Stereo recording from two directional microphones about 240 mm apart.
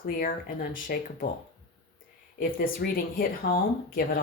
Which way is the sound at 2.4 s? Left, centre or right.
Left.